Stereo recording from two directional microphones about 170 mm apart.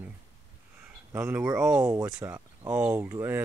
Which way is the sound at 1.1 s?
10° right (ahead or behind).